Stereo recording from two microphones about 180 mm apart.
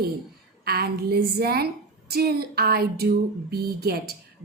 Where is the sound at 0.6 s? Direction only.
60° right (ahead or behind).